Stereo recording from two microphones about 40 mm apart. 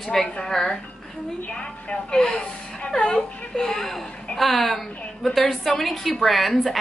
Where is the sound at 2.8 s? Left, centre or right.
Centre.